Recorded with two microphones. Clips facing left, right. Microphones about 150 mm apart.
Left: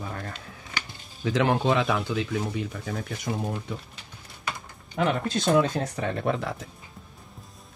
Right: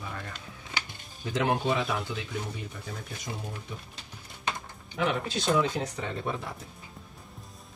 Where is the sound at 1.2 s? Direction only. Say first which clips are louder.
Left 4 dB; 90° left; by 3.7 s 70° left (ahead or behind).